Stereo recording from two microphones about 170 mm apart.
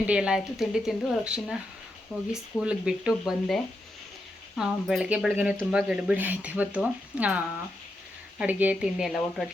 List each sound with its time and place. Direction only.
0.1 s speech: 5° right (ahead or behind)